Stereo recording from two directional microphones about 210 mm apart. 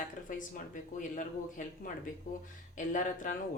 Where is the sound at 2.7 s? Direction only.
35° left (ahead or behind).